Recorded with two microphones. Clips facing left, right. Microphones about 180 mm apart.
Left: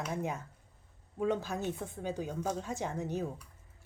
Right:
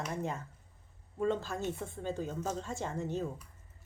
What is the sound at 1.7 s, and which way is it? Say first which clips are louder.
Speech: left 1 dB; centre (ahead or behind).